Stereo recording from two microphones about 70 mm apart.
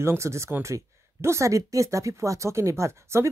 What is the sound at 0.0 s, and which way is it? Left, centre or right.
Speech, right.